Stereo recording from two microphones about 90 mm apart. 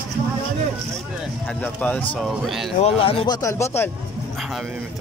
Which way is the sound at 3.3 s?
35° left (ahead or behind).